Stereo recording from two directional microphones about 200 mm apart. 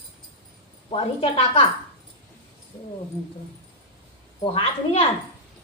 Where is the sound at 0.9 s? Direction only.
25° left (ahead or behind).